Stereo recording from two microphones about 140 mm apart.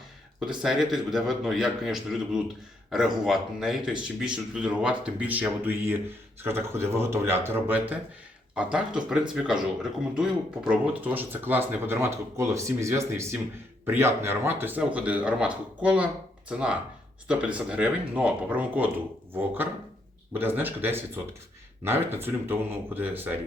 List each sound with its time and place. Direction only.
0.3 s a man's voice: centre (ahead or behind)